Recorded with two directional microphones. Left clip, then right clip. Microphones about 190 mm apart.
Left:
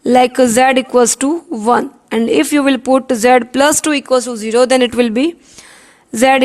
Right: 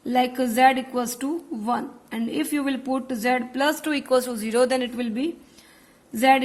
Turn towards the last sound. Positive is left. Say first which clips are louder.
# left 8 dB
turn(degrees=55)  # may be behind; listen again after turning